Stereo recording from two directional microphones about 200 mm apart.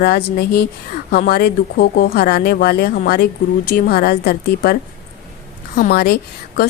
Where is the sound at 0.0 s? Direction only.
55° left (ahead or behind).